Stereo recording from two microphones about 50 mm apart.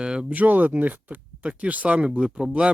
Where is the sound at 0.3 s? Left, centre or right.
Right.